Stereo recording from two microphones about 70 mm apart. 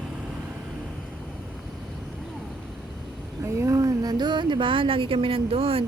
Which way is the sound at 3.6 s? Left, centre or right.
Right.